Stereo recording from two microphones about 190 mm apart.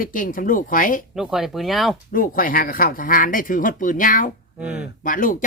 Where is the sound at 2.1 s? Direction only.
45° left (ahead or behind).